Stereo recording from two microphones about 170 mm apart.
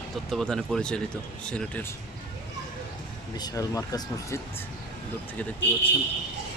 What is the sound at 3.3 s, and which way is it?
Speech, 20° left (ahead or behind).